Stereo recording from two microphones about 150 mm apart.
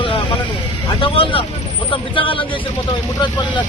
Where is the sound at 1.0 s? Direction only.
35° left (ahead or behind).